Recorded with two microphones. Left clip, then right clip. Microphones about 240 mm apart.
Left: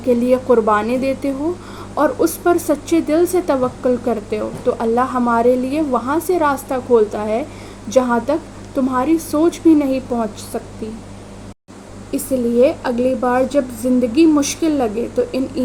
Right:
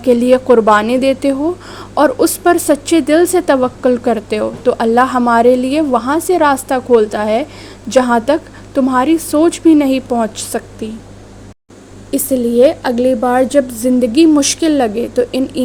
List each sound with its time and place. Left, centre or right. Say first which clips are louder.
0.0 s a woman's voice: right 5 dB; right
12.1 s a woman's voice: right 4 dB; right